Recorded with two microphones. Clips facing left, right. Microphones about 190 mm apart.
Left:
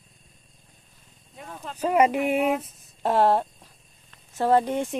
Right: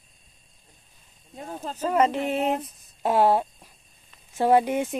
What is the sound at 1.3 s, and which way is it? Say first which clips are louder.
Speech: right 4 dB; 30° right (ahead or behind).